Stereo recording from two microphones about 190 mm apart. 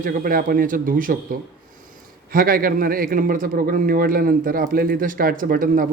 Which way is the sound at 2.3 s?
50° right (ahead or behind).